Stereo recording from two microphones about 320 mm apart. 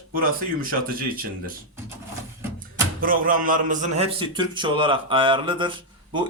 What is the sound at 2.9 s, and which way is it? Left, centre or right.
A man's voice, right.